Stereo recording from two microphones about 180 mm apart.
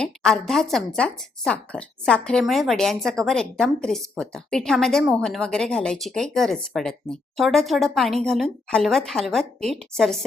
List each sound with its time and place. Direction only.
0.0 s a woman's voice: 5° left (ahead or behind)